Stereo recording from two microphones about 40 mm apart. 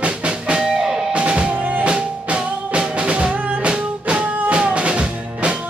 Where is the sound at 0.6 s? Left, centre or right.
Centre.